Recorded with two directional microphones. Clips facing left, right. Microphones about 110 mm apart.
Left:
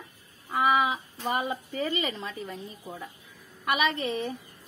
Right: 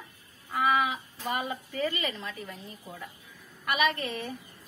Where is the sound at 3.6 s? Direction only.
20° left (ahead or behind).